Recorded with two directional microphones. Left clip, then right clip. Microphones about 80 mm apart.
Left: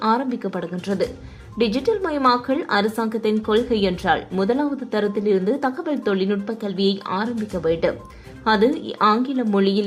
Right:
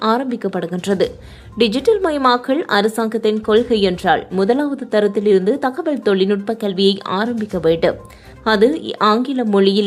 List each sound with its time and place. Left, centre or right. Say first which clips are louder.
0.0 s a woman's voice: right 3 dB; right
0.7 s a woman's voice: right 7 dB; right